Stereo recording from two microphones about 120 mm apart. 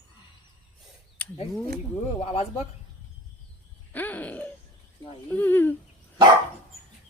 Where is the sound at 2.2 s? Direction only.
55° left (ahead or behind).